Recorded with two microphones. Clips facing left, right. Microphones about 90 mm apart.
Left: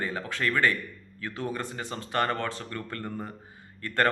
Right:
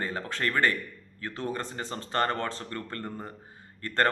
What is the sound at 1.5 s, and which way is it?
Speech, 30° right (ahead or behind).